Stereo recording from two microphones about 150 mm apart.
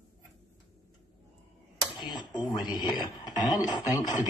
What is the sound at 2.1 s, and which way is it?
Speech, 30° left (ahead or behind).